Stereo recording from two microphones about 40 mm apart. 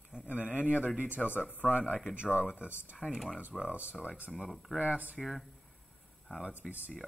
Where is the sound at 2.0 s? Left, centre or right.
Right.